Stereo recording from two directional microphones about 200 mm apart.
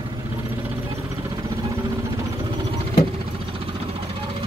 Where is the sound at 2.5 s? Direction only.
25° right (ahead or behind).